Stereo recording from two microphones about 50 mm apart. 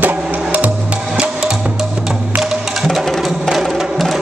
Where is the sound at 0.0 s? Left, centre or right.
Right.